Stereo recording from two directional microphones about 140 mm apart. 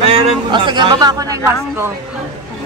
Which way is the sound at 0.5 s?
35° right (ahead or behind).